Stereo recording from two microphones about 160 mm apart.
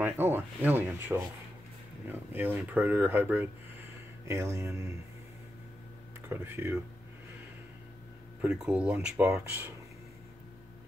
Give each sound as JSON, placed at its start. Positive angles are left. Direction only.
{"t": 0.0, "sound": "speech", "side_deg": -15}
{"t": 6.2, "sound": "speech", "side_deg": -15}
{"t": 8.4, "sound": "speech", "side_deg": -5}